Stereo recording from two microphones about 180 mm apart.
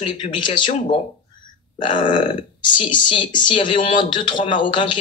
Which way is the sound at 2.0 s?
25° left (ahead or behind).